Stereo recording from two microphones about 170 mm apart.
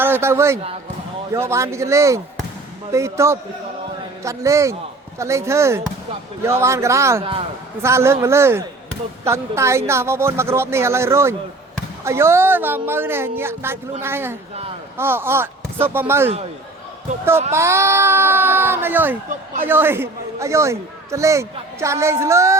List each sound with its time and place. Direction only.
0.0 s a man's voice: 15° right (ahead or behind)
17.5 s a man's voice: 15° right (ahead or behind)